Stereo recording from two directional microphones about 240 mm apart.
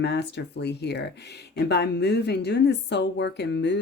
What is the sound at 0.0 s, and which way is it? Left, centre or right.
Speech, left.